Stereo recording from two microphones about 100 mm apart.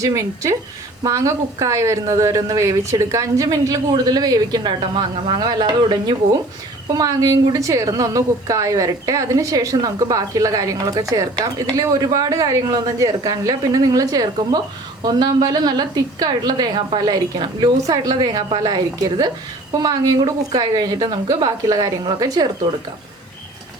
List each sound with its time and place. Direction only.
0.0 s a woman's voice: 30° right (ahead or behind); by 6.4 s 45° right (ahead or behind)
6.8 s a woman's voice: 35° right (ahead or behind)